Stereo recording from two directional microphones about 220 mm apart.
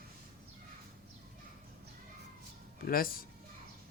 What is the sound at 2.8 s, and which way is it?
Speech, 40° left (ahead or behind).